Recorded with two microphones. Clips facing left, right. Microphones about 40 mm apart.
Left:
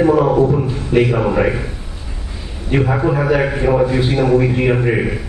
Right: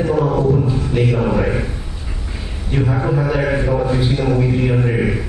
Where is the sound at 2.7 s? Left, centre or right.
Left.